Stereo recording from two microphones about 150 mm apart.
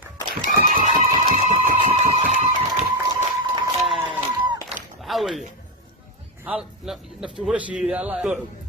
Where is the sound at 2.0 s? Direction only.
50° right (ahead or behind).